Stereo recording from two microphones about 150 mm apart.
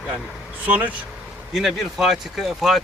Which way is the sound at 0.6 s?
10° right (ahead or behind).